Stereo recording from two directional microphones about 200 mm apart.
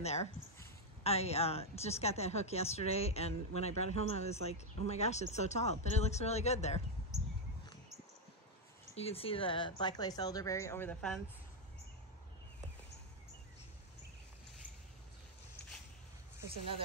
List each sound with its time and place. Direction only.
0.0 s a woman's voice: 35° left (ahead or behind)
8.9 s speech: 30° left (ahead or behind); by 11.1 s 5° left (ahead or behind)